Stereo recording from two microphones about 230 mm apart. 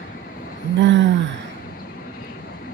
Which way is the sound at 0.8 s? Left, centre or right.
Right.